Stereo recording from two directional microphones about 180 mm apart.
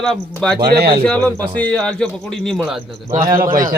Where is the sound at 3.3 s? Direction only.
50° right (ahead or behind).